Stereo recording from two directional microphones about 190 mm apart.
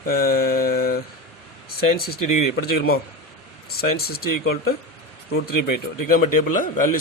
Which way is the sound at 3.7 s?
55° left (ahead or behind).